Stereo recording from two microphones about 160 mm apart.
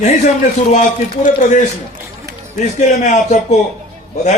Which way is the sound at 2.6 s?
50° left (ahead or behind).